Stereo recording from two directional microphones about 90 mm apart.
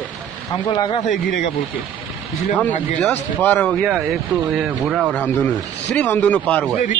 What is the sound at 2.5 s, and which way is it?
Speech, 15° left (ahead or behind).